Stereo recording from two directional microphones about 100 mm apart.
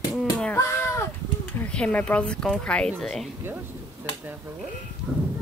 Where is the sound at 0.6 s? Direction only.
30° left (ahead or behind).